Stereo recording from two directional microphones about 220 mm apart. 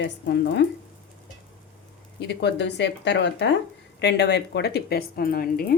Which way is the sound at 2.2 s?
50° left (ahead or behind).